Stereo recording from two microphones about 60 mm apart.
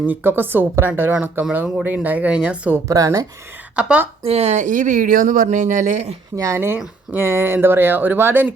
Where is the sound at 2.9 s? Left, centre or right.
Right.